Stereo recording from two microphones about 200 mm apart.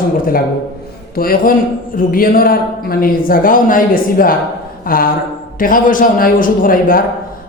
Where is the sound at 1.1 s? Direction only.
45° left (ahead or behind).